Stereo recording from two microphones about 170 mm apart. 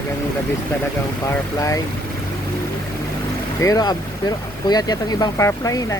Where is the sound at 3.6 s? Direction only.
20° left (ahead or behind).